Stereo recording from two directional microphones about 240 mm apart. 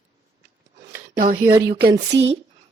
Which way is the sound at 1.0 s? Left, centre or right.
Right.